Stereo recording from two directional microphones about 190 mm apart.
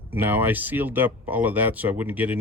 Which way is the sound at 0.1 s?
10° right (ahead or behind).